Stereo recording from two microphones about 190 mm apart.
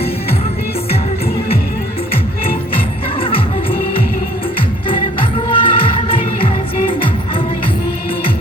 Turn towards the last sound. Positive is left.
turn(degrees=30)  # may be behind; listen again after turning